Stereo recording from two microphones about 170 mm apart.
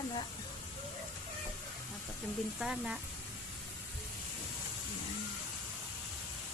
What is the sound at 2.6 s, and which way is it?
Speech, 5° right (ahead or behind).